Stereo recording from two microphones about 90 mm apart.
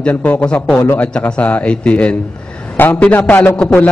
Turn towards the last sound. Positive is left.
turn(degrees=15)  # may be behind; listen again after turning